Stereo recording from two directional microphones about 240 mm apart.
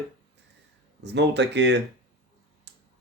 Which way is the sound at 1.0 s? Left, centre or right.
Right.